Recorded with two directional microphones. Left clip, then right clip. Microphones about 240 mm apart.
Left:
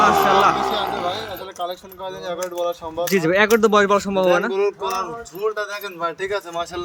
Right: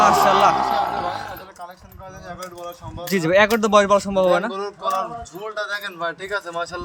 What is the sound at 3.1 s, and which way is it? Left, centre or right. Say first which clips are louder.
Speech: even; centre.